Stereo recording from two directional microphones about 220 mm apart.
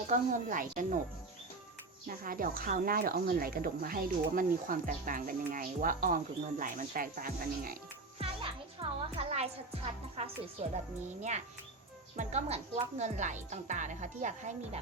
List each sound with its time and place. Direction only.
0.1 s a woman's voice: 35° right (ahead or behind)
2.0 s a woman's voice: 40° right (ahead or behind)
8.2 s a child's voice: 25° right (ahead or behind)